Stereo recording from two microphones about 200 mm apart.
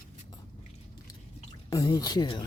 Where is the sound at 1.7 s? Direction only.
20° left (ahead or behind).